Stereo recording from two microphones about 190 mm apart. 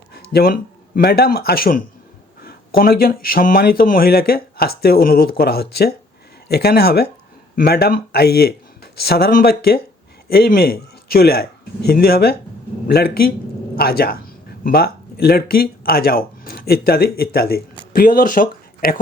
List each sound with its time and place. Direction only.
0.1 s a man's voice: 50° left (ahead or behind)